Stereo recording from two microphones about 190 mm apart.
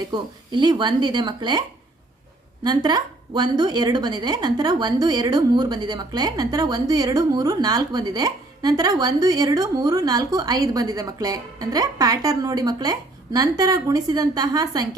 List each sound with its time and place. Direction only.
0.1 s a woman's voice: 25° right (ahead or behind)
2.6 s a woman's voice: 20° right (ahead or behind)